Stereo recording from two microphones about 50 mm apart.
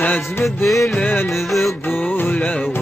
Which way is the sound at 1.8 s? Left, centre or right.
Left.